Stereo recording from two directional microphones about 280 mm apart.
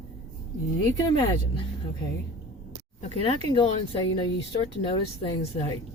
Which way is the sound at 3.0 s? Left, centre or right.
Centre.